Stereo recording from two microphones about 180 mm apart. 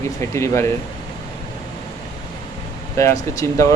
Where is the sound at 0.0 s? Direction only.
15° left (ahead or behind).